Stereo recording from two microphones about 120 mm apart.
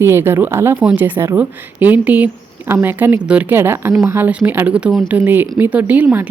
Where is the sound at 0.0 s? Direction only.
20° right (ahead or behind).